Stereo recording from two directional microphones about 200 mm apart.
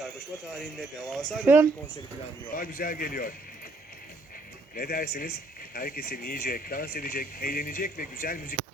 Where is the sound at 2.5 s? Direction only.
45° left (ahead or behind).